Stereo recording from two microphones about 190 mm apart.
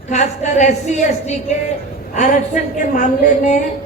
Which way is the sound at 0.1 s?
35° left (ahead or behind).